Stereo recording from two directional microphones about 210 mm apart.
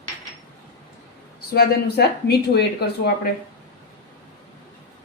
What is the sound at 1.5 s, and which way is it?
A woman's voice, 50° left (ahead or behind).